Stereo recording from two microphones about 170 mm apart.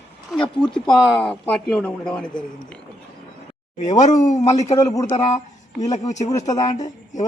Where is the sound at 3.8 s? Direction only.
45° left (ahead or behind).